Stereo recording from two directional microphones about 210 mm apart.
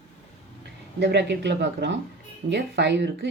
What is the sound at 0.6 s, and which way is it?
Speech, 55° right (ahead or behind).